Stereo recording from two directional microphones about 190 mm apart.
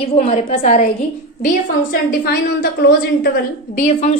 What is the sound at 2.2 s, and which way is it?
A woman's voice, 55° left (ahead or behind).